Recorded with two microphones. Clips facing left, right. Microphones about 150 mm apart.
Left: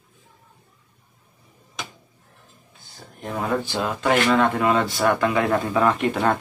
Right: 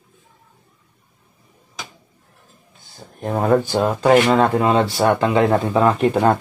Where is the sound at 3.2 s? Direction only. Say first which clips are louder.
Right 8 dB; 45° right (ahead or behind).